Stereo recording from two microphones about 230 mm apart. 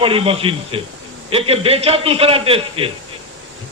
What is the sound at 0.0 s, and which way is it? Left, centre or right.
A man's voice, right.